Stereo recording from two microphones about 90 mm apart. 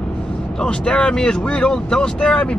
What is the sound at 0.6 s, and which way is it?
Speech, 10° left (ahead or behind).